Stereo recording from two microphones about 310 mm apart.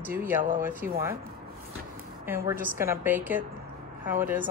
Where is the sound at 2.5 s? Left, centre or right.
Centre.